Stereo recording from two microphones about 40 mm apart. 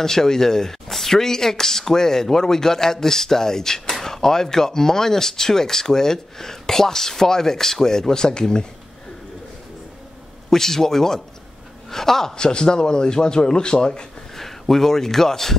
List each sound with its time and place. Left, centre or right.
0.0 s speech: centre
10.5 s a man's voice: centre
14.3 s speech: centre